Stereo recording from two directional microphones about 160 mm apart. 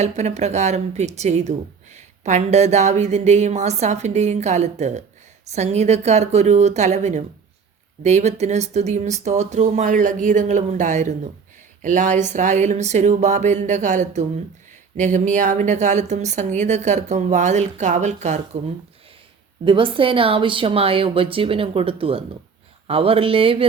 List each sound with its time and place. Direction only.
0.0 s speech: 45° right (ahead or behind)
19.6 s speech: 30° right (ahead or behind)